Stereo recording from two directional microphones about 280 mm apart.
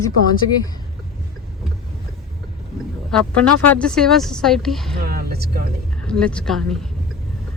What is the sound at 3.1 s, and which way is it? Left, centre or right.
Speech, centre.